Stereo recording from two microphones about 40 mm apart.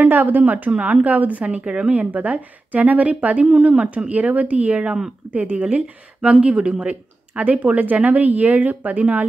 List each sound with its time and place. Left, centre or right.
0.0 s a woman's voice: right
6.3 s a woman's voice: right